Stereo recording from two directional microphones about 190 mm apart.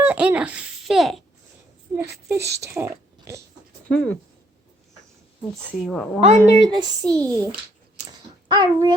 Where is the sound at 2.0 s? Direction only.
15° right (ahead or behind).